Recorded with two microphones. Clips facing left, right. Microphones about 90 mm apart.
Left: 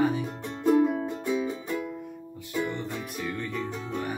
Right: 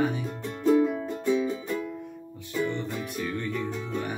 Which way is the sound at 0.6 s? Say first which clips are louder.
Even; 20° left (ahead or behind).